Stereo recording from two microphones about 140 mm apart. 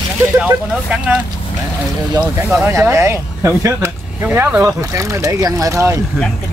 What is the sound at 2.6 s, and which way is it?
Speech, 20° right (ahead or behind).